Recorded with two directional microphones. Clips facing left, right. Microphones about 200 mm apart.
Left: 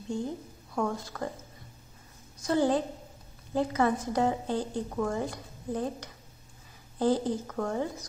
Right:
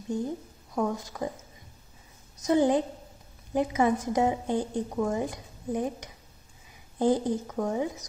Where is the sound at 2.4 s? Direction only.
20° right (ahead or behind).